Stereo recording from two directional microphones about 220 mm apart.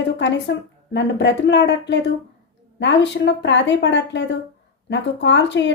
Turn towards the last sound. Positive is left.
turn(degrees=55)  # may be behind; listen again after turning